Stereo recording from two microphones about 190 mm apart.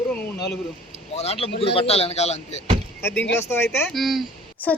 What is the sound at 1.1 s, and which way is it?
Speech, 30° left (ahead or behind).